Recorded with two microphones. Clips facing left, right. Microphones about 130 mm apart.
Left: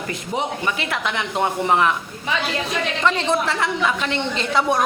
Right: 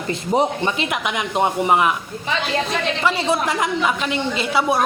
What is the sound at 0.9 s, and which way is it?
A woman's voice, 15° right (ahead or behind).